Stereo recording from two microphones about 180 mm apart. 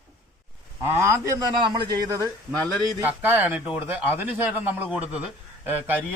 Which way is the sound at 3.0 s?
10° right (ahead or behind).